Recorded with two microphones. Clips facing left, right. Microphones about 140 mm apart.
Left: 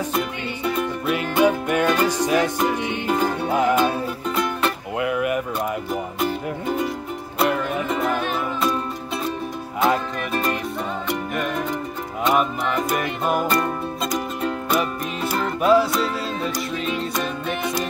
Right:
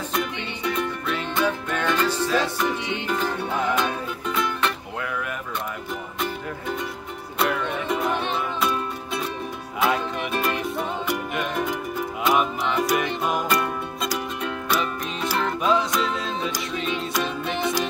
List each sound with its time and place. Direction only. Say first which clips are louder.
0.1 s music: left 2 dB; 5° left (ahead or behind)
3.2 s music: left 7 dB; 45° left (ahead or behind)
4.4 s music: left 2 dB; 5° left (ahead or behind)
7.3 s music: left 3 dB; centre (ahead or behind)
9.8 s music: left 2 dB; centre (ahead or behind)
15.3 s music: left 5 dB; 5° left (ahead or behind)